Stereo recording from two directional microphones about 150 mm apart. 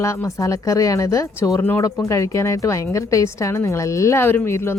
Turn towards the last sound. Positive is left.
turn(degrees=15)  # may be behind; listen again after turning